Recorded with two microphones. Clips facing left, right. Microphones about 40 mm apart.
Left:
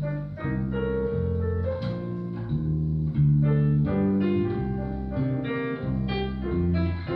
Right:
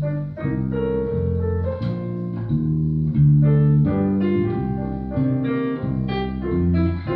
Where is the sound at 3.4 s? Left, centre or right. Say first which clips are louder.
Right 6 dB; centre.